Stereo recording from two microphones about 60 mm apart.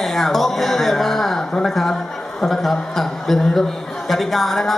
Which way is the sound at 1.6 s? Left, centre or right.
Centre.